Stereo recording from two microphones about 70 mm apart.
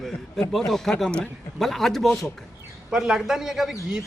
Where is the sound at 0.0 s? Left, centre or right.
Centre.